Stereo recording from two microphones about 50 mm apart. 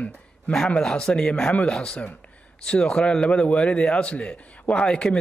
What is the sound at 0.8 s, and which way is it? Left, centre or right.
Speech, centre.